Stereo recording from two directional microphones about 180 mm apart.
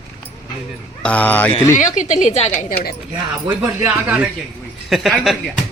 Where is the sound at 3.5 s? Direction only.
10° right (ahead or behind).